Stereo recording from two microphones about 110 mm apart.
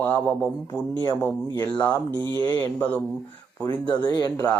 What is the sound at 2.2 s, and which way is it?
Speech, 20° left (ahead or behind).